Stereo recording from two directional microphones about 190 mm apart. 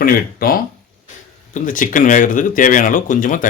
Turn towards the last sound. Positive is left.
turn(degrees=45)  # may be behind; listen again after turning